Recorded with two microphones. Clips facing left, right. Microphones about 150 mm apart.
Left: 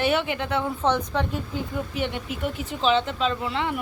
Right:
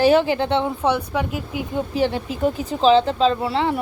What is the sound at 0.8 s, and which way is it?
Speech, 10° right (ahead or behind).